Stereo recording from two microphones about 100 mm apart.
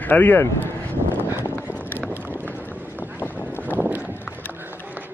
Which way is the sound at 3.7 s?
20° right (ahead or behind).